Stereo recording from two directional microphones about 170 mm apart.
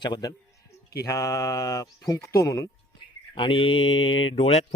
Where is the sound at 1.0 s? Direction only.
20° left (ahead or behind).